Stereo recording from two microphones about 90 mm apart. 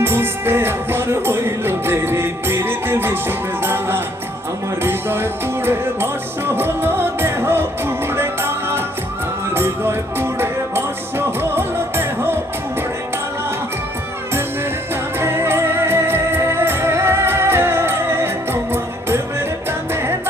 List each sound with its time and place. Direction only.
0.0 s music: 25° right (ahead or behind)
15.2 s music: 25° right (ahead or behind)